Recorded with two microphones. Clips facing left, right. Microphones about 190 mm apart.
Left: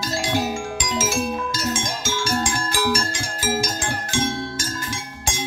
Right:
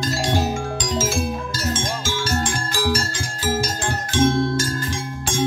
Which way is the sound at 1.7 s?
10° left (ahead or behind).